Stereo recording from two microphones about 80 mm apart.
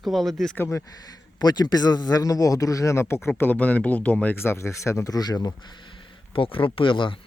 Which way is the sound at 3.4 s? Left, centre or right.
Left.